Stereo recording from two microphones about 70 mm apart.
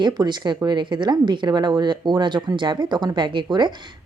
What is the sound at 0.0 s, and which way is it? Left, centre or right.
Speech, right.